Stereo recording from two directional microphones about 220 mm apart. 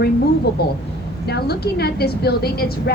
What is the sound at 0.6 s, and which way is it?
A woman's voice, 45° left (ahead or behind).